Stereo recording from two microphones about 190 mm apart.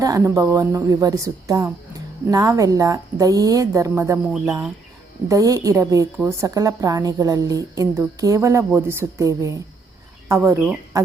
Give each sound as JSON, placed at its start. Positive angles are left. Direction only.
{"t": 0.0, "sound": "a woman's voice", "side_deg": -15}
{"t": 4.3, "sound": "speech", "side_deg": -5}
{"t": 5.3, "sound": "a woman's voice", "side_deg": -20}